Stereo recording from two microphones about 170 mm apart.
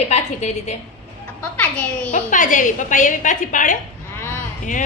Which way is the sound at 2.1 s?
50° left (ahead or behind).